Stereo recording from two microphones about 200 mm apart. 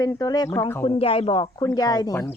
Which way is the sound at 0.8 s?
30° left (ahead or behind).